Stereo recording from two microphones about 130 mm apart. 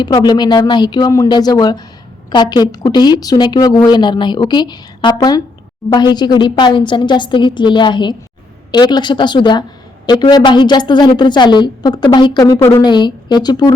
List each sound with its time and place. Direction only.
0.0 s a woman's voice: 35° left (ahead or behind)